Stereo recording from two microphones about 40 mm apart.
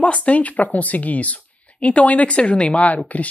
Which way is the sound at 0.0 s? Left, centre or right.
Left.